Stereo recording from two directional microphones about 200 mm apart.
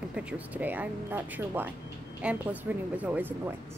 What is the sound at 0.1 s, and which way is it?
A woman's voice, 5° right (ahead or behind).